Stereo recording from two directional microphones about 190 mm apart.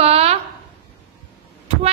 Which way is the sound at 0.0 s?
30° right (ahead or behind).